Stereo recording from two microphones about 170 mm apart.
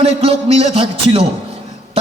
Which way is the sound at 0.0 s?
35° right (ahead or behind).